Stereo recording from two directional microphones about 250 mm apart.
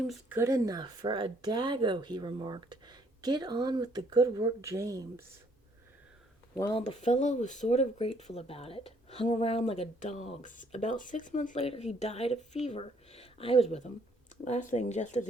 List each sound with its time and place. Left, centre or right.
0.1 s speech: centre
6.5 s speech: centre
6.8 s speech: left